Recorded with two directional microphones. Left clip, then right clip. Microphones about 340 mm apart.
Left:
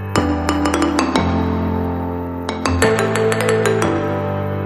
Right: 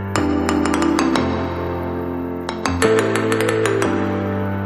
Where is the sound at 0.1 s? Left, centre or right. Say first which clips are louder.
Left 1 dB; centre.